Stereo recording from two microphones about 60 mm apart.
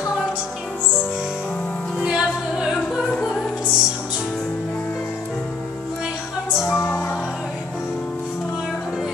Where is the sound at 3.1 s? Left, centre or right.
Centre.